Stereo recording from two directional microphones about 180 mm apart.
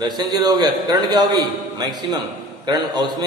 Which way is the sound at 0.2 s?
20° right (ahead or behind).